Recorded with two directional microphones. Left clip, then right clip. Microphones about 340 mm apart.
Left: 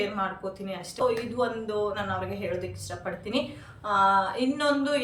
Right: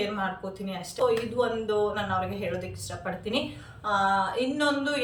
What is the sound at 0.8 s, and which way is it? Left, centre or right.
A woman's voice, centre.